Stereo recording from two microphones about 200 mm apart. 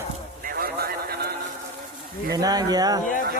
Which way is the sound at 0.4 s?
50° right (ahead or behind).